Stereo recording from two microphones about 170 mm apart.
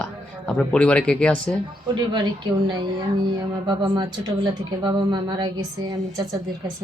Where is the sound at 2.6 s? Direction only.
25° right (ahead or behind).